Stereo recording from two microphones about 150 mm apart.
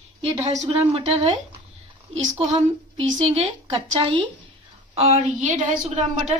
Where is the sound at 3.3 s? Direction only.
40° right (ahead or behind).